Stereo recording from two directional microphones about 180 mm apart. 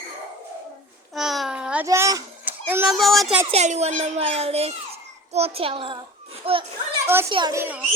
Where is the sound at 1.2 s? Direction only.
Centre (ahead or behind).